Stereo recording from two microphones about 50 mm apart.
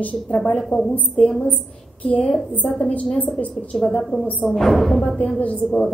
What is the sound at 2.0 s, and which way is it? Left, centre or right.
A woman's voice, left.